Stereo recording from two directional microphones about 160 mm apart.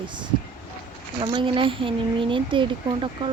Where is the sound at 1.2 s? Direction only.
35° right (ahead or behind).